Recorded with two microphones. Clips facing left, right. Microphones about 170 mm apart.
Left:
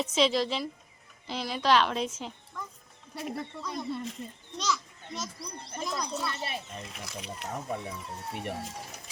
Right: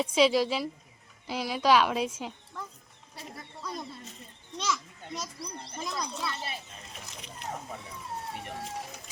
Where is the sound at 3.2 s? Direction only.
65° left (ahead or behind).